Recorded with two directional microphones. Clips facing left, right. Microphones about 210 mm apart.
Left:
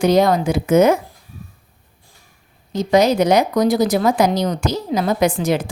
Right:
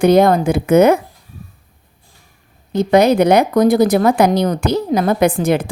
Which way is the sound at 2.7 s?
60° right (ahead or behind).